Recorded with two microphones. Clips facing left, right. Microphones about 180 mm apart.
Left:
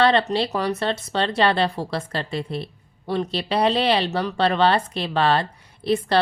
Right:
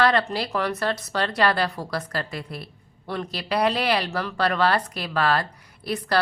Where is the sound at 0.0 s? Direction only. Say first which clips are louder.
Left 3 dB; 25° left (ahead or behind).